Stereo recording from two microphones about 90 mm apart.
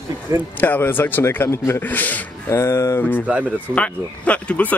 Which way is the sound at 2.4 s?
30° left (ahead or behind).